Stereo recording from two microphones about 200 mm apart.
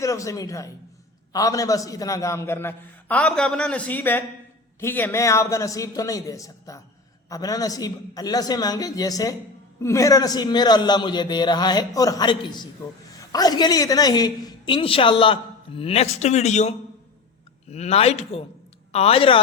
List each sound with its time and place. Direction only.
0.0 s a man's voice: 15° left (ahead or behind)